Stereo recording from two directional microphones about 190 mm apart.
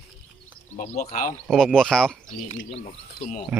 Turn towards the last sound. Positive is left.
turn(degrees=-5)  # may be behind; listen again after turning